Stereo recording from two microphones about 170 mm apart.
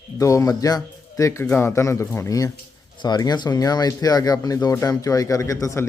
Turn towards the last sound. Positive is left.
turn(degrees=20)  # may be behind; listen again after turning